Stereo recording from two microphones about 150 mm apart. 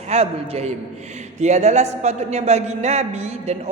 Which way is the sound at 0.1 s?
45° right (ahead or behind).